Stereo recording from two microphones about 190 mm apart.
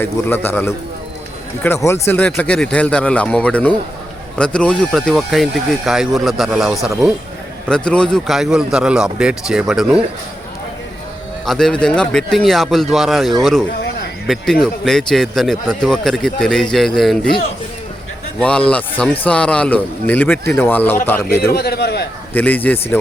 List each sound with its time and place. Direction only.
0.0 s speech: 10° left (ahead or behind)
11.4 s speech: 5° left (ahead or behind)
21.4 s a man's voice: 55° left (ahead or behind)
22.3 s speech: 10° left (ahead or behind)